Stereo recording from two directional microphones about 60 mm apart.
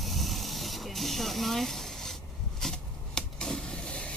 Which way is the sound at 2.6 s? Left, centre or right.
Centre.